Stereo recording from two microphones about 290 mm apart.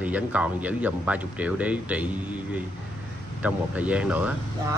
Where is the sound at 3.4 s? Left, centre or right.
Centre.